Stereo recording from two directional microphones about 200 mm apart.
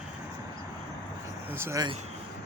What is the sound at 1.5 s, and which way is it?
Speech, 15° right (ahead or behind).